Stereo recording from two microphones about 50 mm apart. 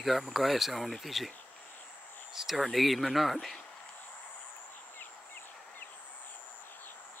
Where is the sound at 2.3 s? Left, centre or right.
Centre.